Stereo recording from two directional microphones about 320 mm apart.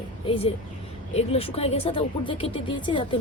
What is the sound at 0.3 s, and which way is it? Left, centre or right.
Speech, centre.